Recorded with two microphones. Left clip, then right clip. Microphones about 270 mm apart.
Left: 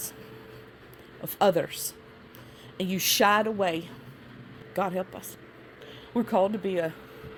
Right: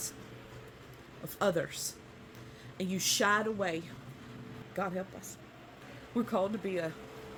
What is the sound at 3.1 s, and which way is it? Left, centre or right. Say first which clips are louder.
Speech: left 7 dB; left.